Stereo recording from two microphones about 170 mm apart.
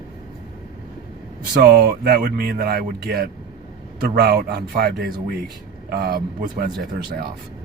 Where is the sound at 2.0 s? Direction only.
65° right (ahead or behind).